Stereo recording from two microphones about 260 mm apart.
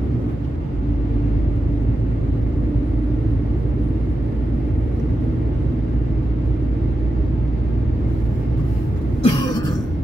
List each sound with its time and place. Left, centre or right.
9.2 s throat clearing: centre